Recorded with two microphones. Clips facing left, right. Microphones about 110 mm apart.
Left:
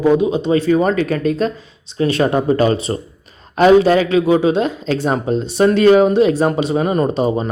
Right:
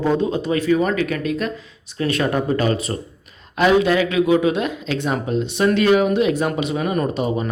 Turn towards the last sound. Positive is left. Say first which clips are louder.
# left 5 dB
turn(degrees=30)  # may be behind; listen again after turning